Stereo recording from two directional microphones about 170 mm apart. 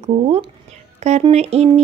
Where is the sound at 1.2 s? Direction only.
40° right (ahead or behind).